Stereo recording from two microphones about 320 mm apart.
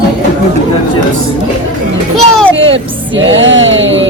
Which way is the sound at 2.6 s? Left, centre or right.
Right.